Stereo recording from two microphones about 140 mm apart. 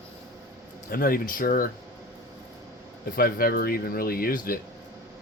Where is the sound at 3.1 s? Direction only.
90° left.